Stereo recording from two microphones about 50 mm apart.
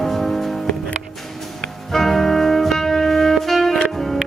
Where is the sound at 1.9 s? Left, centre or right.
Centre.